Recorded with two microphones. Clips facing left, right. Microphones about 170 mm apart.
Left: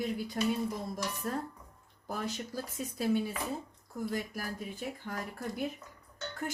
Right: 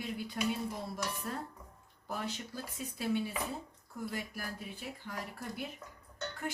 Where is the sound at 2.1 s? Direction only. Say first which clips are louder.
Left 3 dB; 40° left (ahead or behind).